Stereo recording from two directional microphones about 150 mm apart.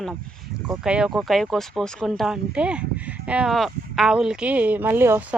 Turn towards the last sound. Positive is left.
turn(degrees=-15)  # may be behind; listen again after turning